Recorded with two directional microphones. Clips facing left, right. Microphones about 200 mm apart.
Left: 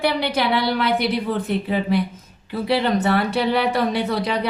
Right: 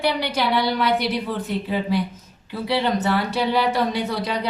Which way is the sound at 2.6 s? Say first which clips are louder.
Left 2 dB; 55° left (ahead or behind).